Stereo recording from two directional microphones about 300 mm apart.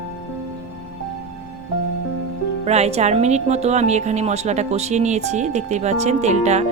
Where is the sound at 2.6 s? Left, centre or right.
Right.